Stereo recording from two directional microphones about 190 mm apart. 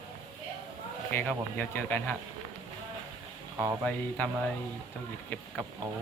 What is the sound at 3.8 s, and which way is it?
Speech, 5° left (ahead or behind).